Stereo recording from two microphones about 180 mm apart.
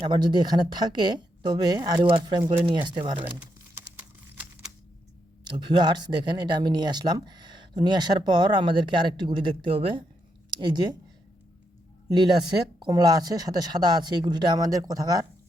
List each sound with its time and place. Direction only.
0.0 s speech: 25° right (ahead or behind)
3.2 s a sound: 10° right (ahead or behind)
5.5 s speech: 25° right (ahead or behind)
12.0 s speech: 25° right (ahead or behind)